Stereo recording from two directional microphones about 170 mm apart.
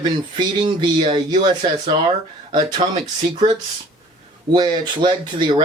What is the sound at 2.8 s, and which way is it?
Speech, 45° right (ahead or behind).